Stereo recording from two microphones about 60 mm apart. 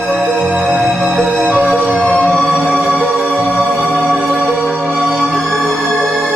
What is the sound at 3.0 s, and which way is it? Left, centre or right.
Music, right.